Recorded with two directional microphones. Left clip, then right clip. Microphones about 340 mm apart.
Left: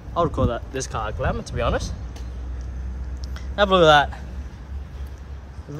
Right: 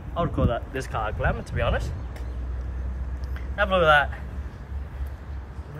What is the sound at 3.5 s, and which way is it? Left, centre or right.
Speech, centre.